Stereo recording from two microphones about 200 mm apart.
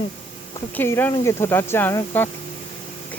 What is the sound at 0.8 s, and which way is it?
Speech, 10° left (ahead or behind).